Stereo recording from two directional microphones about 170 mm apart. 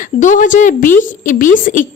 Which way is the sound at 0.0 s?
50° left (ahead or behind).